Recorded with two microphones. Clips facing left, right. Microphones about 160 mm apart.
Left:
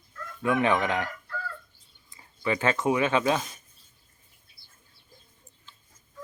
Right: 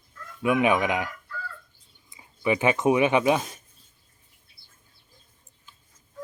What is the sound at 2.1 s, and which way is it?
Speech, 15° right (ahead or behind).